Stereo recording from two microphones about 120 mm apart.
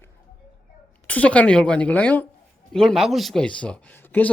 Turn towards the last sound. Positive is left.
turn(degrees=15)  # may be behind; listen again after turning